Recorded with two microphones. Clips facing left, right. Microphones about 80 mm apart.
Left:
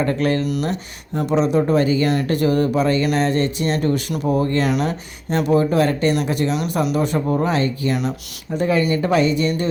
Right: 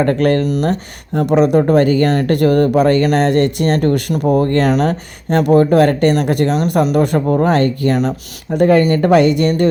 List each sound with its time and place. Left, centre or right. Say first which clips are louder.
0.0 s speech: right 6 dB; right